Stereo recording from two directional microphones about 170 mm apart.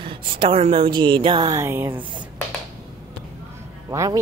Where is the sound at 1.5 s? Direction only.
15° right (ahead or behind).